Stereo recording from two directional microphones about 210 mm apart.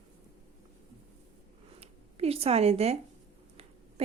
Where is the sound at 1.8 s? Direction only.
30° right (ahead or behind).